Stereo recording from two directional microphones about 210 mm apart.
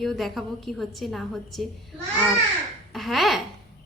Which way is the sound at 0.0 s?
Centre (ahead or behind).